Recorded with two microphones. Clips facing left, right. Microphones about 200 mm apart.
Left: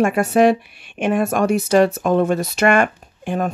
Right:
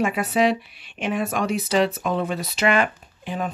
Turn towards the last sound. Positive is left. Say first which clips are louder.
# left 6 dB
turn(degrees=50)  # may be behind; listen again after turning